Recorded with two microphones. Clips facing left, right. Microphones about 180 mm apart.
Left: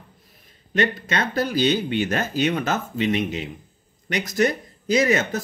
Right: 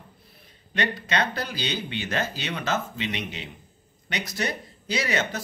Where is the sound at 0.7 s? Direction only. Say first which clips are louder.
Left 5 dB; 45° left (ahead or behind).